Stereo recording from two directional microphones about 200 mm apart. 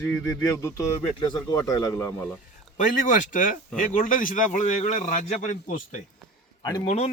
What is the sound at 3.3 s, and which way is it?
A man's voice, 40° left (ahead or behind).